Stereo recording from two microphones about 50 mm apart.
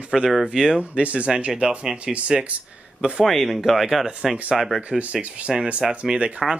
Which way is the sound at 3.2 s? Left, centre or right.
Centre.